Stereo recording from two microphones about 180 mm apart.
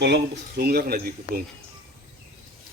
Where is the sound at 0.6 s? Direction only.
60° right (ahead or behind).